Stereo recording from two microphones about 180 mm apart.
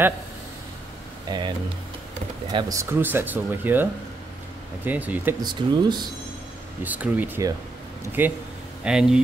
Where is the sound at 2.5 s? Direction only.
15° right (ahead or behind).